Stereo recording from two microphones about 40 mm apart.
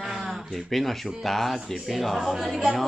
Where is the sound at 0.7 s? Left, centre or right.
Centre.